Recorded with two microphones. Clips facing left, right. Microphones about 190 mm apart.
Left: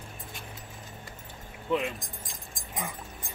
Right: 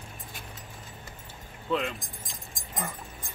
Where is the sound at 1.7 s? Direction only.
15° left (ahead or behind).